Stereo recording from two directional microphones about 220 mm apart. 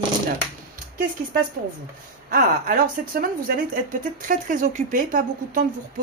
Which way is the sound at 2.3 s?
40° right (ahead or behind).